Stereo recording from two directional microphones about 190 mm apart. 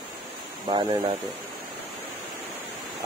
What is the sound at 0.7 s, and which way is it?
Speech, 25° right (ahead or behind).